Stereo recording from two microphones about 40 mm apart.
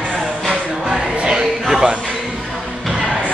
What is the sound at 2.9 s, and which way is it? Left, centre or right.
Music, right.